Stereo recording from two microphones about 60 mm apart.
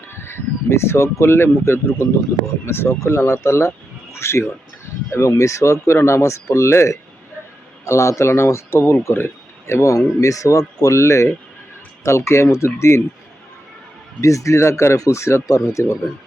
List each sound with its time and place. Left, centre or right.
0.3 s speech: left
3.0 s speech: left
5.1 s speech: left
10.2 s speech: left
14.2 s speech: left
14.9 s speech: left